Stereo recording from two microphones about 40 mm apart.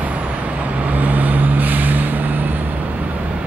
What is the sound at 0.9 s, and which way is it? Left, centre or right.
Vehicle, right.